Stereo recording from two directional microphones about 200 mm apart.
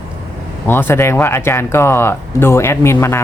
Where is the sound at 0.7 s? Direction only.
10° left (ahead or behind).